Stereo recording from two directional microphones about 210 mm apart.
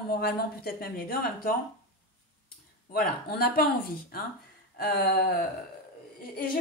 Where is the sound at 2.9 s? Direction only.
45° left (ahead or behind).